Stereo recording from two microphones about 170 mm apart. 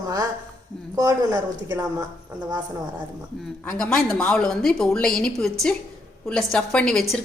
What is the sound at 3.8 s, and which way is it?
A woman's voice, 5° left (ahead or behind).